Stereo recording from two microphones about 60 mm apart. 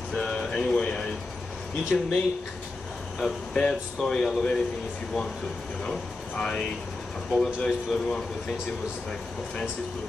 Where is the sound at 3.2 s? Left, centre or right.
Centre.